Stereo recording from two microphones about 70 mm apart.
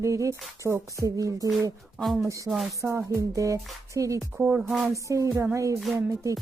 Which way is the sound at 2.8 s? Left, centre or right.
Centre.